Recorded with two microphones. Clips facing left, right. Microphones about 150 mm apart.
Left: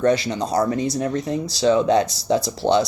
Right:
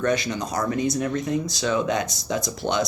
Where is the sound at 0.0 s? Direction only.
30° left (ahead or behind).